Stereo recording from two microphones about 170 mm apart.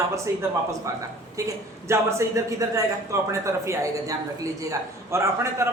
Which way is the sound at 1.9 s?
15° right (ahead or behind).